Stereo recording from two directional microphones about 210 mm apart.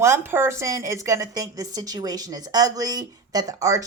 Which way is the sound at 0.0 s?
10° right (ahead or behind).